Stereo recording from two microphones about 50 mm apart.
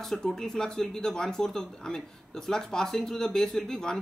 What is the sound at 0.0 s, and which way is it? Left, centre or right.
Speech, centre.